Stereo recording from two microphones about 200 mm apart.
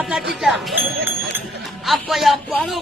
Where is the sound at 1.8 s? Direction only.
Centre (ahead or behind).